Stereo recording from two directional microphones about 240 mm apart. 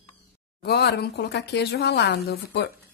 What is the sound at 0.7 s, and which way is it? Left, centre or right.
A woman's voice, left.